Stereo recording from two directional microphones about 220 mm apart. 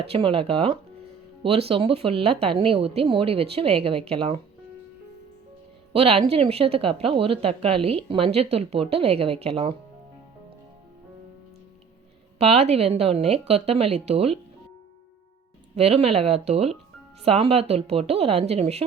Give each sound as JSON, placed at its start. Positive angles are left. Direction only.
{"t": 0.0, "sound": "a woman's voice", "side_deg": -25}
{"t": 5.9, "sound": "a woman's voice", "side_deg": -25}
{"t": 12.4, "sound": "a woman's voice", "side_deg": -30}
{"t": 15.7, "sound": "a woman's voice", "side_deg": -25}